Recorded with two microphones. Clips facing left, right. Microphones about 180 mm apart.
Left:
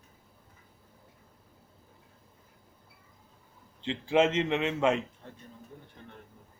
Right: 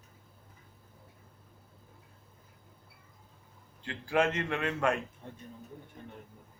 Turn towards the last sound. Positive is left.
turn(degrees=20)  # may be behind; listen again after turning